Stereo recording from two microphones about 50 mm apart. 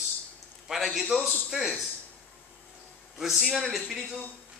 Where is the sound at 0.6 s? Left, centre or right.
Centre.